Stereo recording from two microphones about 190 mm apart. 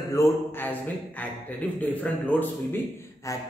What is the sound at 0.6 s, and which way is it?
A man's voice, 10° left (ahead or behind).